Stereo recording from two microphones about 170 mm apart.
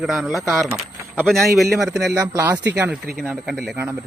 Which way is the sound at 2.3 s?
15° right (ahead or behind).